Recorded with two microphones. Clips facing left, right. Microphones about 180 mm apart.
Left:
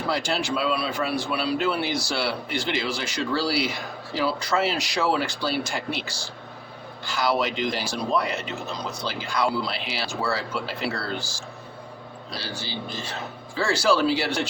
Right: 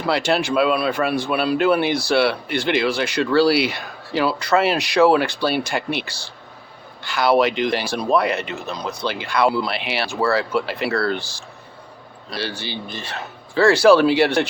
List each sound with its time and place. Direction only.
0.1 s speech: 70° right (ahead or behind)